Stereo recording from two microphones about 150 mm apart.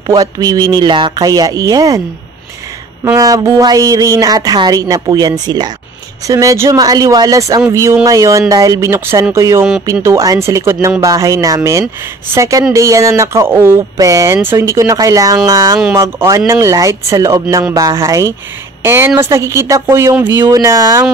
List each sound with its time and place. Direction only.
0.0 s speech: 30° right (ahead or behind)
3.0 s speech: 25° right (ahead or behind)